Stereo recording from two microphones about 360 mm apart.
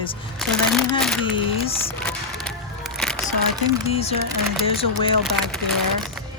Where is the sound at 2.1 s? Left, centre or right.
Centre.